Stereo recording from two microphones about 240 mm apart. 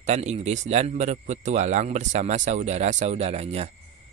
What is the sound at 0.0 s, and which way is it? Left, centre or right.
Speech, right.